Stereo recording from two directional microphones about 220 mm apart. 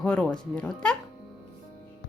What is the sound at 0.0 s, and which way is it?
Speech, 5° left (ahead or behind).